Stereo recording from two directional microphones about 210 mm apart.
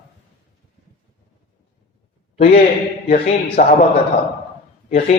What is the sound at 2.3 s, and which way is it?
A man's voice, 30° left (ahead or behind).